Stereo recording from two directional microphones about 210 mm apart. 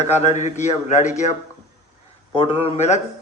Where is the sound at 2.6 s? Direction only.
30° left (ahead or behind).